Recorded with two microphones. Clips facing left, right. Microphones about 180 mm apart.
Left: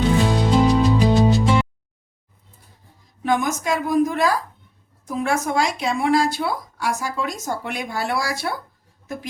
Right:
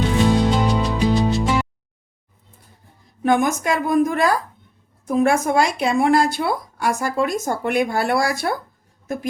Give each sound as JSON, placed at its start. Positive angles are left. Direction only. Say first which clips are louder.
{"t": 0.3, "sound": "music", "louder": "even", "side_deg": 0}
{"t": 3.2, "sound": "speech", "louder": "right 3 dB", "side_deg": -55}